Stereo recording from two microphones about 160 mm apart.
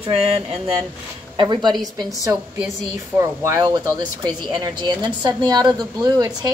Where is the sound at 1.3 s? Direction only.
30° right (ahead or behind).